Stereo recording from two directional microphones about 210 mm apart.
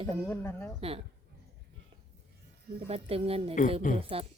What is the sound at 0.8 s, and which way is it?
Speech, 25° right (ahead or behind).